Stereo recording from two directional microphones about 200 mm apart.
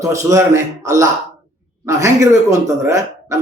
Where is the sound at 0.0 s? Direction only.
15° right (ahead or behind).